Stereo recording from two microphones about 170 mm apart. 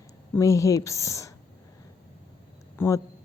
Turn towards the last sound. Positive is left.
turn(degrees=20)  # may be behind; listen again after turning